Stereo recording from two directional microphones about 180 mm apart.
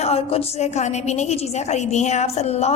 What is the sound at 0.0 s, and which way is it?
A woman's voice, 35° left (ahead or behind).